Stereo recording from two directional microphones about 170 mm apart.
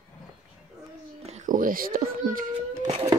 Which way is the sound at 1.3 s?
55° right (ahead or behind).